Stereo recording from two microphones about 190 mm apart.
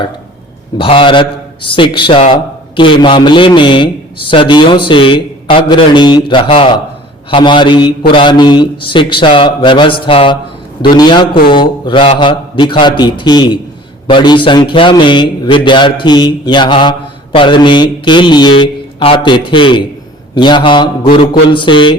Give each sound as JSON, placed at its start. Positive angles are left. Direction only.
{"t": 0.8, "sound": "a man's voice", "side_deg": 25}